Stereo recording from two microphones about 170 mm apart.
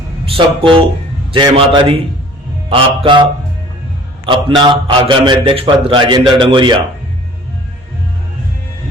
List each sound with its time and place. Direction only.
0.3 s a man's voice: 30° right (ahead or behind)
4.3 s a man's voice: 30° right (ahead or behind)